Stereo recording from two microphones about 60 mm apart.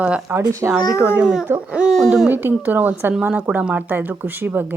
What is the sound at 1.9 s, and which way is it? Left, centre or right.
Speech, centre.